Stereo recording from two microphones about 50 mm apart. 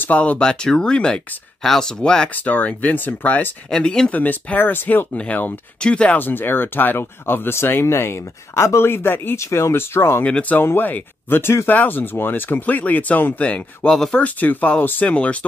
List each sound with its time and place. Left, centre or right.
0.0 s speech: left
0.4 s speech: centre
2.3 s speech: left
3.7 s speech: centre
4.1 s speech: left
5.1 s speech: left
6.1 s speech: left
9.4 s speech: left
10.7 s speech: left
13.8 s speech: centre
14.1 s speech: left